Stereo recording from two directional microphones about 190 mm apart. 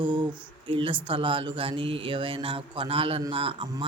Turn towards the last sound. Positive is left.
turn(degrees=-25)  # may be behind; listen again after turning